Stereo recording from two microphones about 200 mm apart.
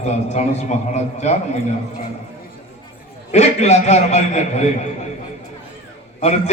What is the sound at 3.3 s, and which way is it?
A man's voice, 35° left (ahead or behind).